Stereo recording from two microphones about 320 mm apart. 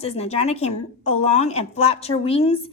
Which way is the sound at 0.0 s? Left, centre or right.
Centre.